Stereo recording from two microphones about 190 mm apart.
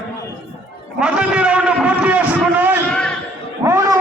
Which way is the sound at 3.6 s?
20° right (ahead or behind).